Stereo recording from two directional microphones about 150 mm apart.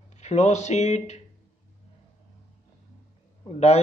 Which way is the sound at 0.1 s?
50° left (ahead or behind).